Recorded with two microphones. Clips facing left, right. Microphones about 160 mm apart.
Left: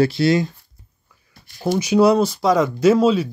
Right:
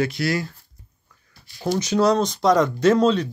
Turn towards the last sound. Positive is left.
turn(degrees=5)  # may be behind; listen again after turning